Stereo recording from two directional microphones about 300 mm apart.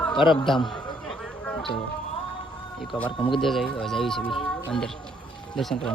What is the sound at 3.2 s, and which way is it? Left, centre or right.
Speech, centre.